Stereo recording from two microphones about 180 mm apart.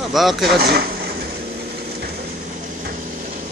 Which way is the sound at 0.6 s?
65° right (ahead or behind).